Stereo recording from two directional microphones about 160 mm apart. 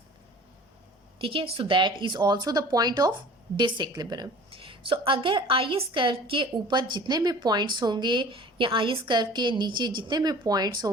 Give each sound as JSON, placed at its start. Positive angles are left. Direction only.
{"t": 1.2, "sound": "a woman's voice", "side_deg": -35}